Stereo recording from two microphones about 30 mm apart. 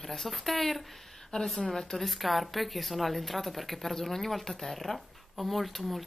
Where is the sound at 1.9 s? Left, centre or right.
Centre.